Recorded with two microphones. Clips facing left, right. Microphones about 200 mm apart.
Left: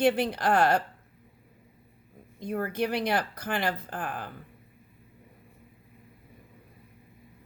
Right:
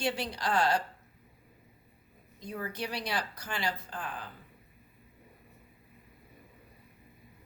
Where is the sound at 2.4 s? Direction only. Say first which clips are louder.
Left 8 dB; 55° left (ahead or behind).